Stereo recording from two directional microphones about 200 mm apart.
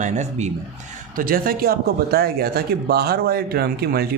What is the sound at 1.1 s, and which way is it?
Speech, 45° right (ahead or behind).